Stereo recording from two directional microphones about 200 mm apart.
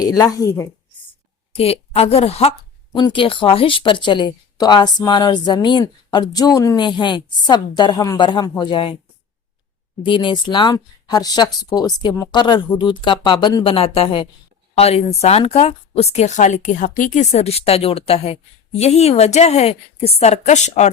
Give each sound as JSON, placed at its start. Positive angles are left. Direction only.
{"t": 0.0, "sound": "a woman's voice", "side_deg": 20}
{"t": 1.5, "sound": "speech", "side_deg": 30}
{"t": 10.0, "sound": "speech", "side_deg": 25}